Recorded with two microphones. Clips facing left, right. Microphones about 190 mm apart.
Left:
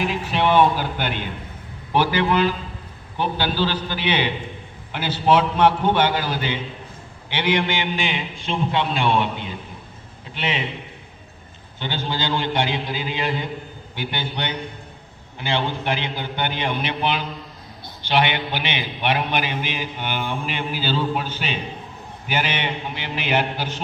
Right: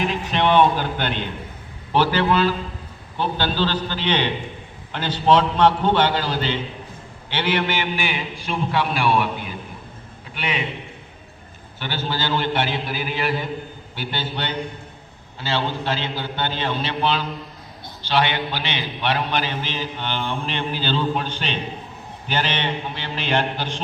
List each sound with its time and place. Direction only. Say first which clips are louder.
0.0 s a man's voice: even; 5° left (ahead or behind); by 10.6 s 25° left (ahead or behind)
11.8 s a man's voice: even; 15° left (ahead or behind)